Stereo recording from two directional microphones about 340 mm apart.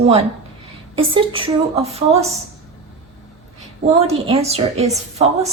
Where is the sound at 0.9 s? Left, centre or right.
Centre.